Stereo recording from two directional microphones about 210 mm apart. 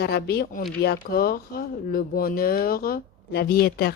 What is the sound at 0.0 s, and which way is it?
Speech, 50° left (ahead or behind).